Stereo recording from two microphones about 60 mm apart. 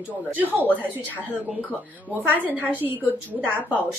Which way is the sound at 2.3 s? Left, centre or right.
Right.